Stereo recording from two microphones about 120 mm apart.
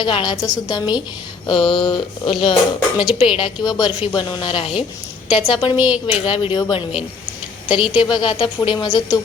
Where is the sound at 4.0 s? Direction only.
50° left (ahead or behind).